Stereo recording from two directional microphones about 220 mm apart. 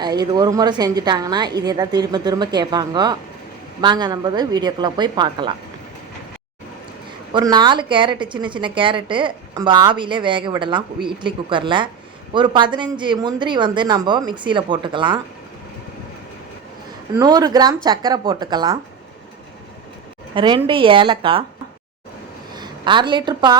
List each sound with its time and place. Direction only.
0.0 s a woman's voice: 20° right (ahead or behind)
7.3 s a woman's voice: 20° right (ahead or behind)
17.2 s a woman's voice: 15° right (ahead or behind)
20.3 s a woman's voice: 20° right (ahead or behind)
22.5 s a woman's voice: 20° right (ahead or behind)